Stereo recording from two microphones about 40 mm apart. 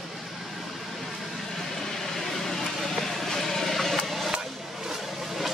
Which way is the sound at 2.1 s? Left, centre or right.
Centre.